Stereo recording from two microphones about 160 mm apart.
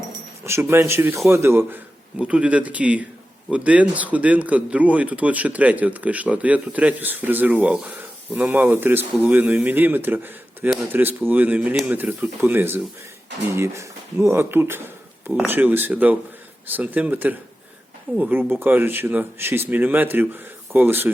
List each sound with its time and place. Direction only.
0.4 s speech: 15° right (ahead or behind)
10.7 s speech: centre (ahead or behind)